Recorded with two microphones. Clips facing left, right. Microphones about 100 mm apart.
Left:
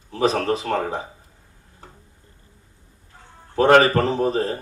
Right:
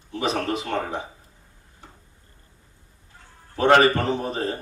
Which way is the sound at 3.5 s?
40° left (ahead or behind).